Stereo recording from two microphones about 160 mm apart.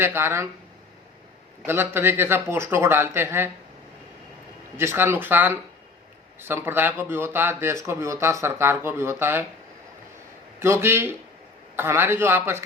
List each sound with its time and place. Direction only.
0.0 s speech: 15° right (ahead or behind)
1.6 s speech: 15° right (ahead or behind)
4.8 s speech: 15° right (ahead or behind)
10.6 s speech: 15° right (ahead or behind)